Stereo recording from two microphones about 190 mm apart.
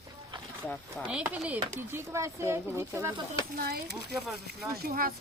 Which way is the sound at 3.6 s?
55° right (ahead or behind).